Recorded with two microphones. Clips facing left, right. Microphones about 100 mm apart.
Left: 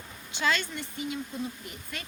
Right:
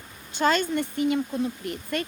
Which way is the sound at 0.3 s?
45° right (ahead or behind).